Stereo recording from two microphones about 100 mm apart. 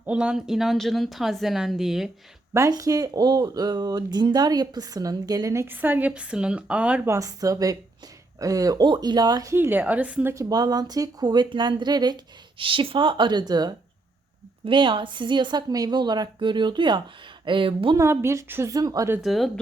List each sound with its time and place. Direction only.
0.0 s speech: 10° right (ahead or behind)
2.5 s speech: 35° right (ahead or behind); by 7.0 s 10° right (ahead or behind)
7.0 s speech: 30° right (ahead or behind)
9.5 s a woman's voice: 20° right (ahead or behind)
10.3 s speech: 40° right (ahead or behind)
14.6 s speech: 55° right (ahead or behind)
17.9 s a woman's voice: 25° right (ahead or behind)
18.7 s speech: 35° right (ahead or behind)
19.2 s speech: centre (ahead or behind)